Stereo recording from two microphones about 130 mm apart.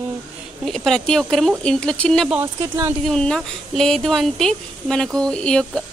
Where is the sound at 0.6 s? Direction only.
5° left (ahead or behind).